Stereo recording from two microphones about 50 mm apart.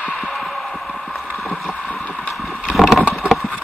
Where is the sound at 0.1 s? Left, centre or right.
Centre.